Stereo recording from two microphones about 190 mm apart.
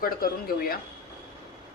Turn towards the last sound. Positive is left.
turn(degrees=50)  # may be behind; listen again after turning